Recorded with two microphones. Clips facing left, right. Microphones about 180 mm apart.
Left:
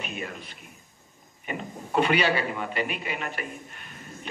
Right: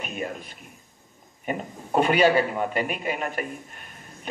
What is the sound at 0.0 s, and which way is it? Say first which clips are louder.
A man's voice: right 4 dB; 45° right (ahead or behind).